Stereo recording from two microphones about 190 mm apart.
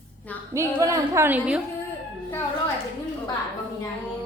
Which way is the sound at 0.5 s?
15° right (ahead or behind).